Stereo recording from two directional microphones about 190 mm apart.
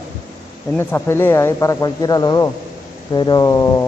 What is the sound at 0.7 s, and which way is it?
A man's voice, 15° left (ahead or behind).